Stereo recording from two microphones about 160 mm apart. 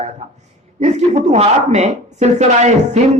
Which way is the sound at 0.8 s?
45° right (ahead or behind).